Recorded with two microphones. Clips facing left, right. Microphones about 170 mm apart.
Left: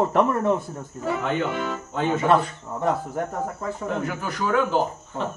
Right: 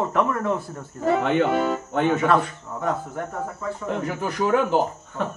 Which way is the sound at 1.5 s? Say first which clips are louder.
Right 6 dB; 45° right (ahead or behind).